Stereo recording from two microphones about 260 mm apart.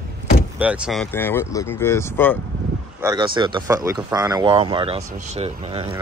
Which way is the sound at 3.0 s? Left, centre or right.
Centre.